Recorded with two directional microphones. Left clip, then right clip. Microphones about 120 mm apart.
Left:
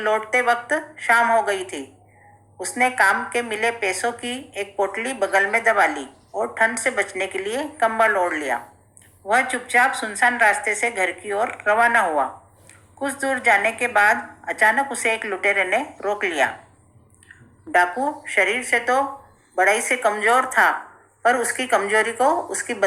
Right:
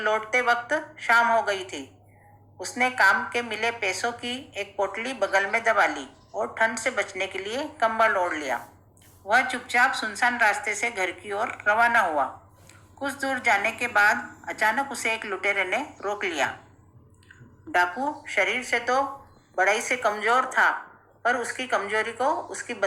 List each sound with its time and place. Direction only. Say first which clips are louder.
0.0 s a woman's voice: left 4 dB; 25° left (ahead or behind)